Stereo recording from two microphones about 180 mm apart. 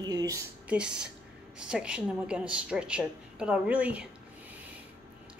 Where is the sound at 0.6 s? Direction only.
5° right (ahead or behind).